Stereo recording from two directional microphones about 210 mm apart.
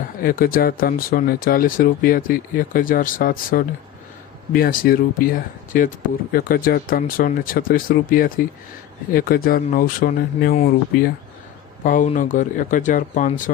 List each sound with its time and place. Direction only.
0.2 s speech: 45° left (ahead or behind)